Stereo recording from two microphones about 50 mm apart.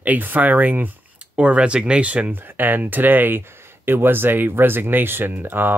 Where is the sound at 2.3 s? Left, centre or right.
Right.